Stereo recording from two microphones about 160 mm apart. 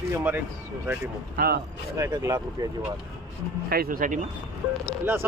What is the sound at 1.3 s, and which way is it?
Speech, 70° right (ahead or behind).